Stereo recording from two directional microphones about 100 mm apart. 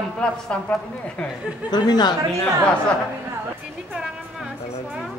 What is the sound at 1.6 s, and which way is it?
Speech, 45° left (ahead or behind).